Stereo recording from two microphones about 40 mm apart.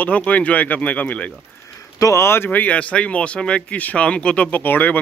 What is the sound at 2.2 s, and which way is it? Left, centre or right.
Speech, left.